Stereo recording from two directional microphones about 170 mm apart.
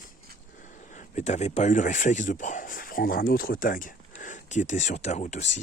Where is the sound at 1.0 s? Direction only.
45° left (ahead or behind).